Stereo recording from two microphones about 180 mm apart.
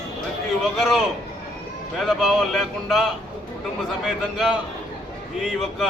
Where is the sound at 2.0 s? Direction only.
Centre (ahead or behind).